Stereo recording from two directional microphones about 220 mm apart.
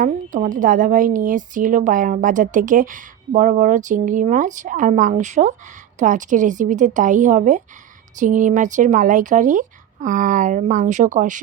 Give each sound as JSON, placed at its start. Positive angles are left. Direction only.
{"t": 0.0, "sound": "a woman's voice", "side_deg": -35}